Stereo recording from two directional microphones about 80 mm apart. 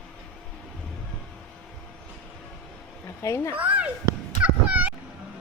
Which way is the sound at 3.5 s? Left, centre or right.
Centre.